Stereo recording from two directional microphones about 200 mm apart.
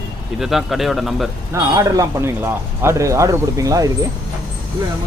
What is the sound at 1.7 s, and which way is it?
Speech, 20° right (ahead or behind).